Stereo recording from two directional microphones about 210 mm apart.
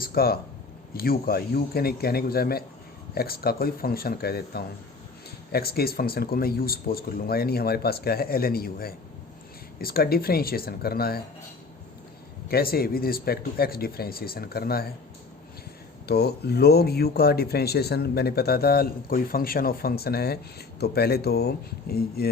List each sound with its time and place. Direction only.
0.0 s a sound: 45° left (ahead or behind)
0.9 s speech: 45° left (ahead or behind)
12.5 s speech: 45° left (ahead or behind)
16.0 s speech: 50° left (ahead or behind)